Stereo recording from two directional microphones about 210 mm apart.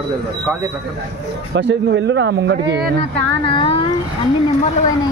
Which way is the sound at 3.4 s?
25° left (ahead or behind).